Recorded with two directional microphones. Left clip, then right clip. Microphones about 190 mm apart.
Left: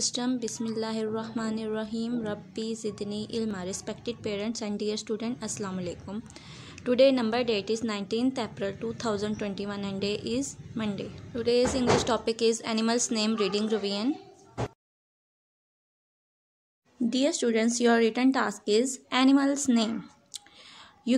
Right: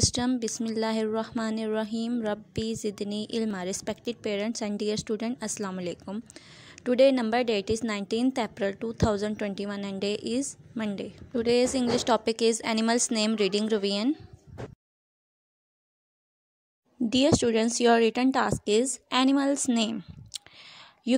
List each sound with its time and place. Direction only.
0.0 s speech: 45° right (ahead or behind)
17.1 s speech: 40° right (ahead or behind)